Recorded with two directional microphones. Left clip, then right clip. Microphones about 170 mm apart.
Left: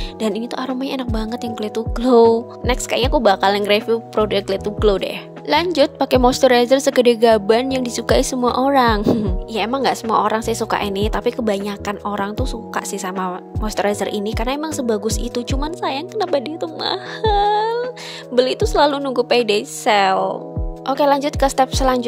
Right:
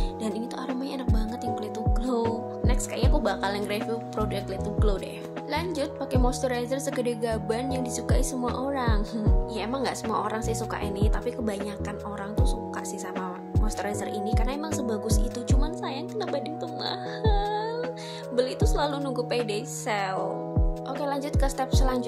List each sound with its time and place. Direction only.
0.2 s speech: 45° left (ahead or behind)